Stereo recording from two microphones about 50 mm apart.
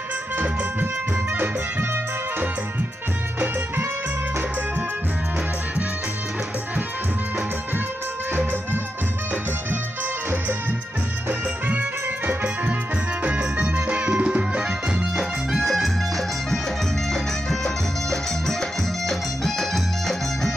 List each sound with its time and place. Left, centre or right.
11.2 s music: right
15.5 s music: centre